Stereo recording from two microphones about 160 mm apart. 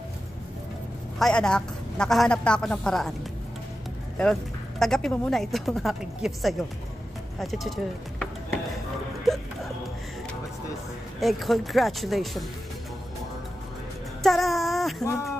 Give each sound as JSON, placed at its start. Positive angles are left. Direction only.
{"t": 1.2, "sound": "speech", "side_deg": 5}
{"t": 4.2, "sound": "speech", "side_deg": 5}
{"t": 11.1, "sound": "speech", "side_deg": 0}
{"t": 14.2, "sound": "a sound", "side_deg": 0}
{"t": 15.0, "sound": "speech", "side_deg": 20}